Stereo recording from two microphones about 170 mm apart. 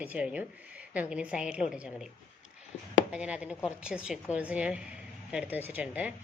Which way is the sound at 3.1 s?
5° right (ahead or behind).